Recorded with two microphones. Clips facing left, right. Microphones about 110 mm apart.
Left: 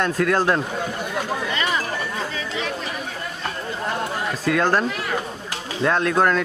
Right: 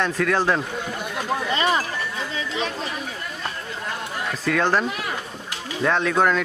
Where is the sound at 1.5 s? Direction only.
25° right (ahead or behind).